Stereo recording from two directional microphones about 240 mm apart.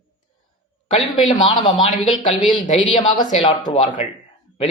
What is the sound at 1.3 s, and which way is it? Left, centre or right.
A man's voice, centre.